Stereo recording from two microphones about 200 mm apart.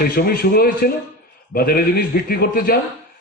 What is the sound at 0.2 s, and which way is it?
A man's voice, 50° left (ahead or behind).